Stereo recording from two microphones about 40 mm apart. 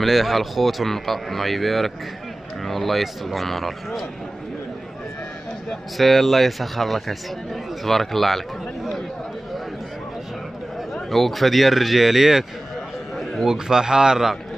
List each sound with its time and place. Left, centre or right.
0.0 s speech: centre
5.9 s speech: centre
11.1 s speech: centre
13.1 s a sound: centre
13.5 s speech: centre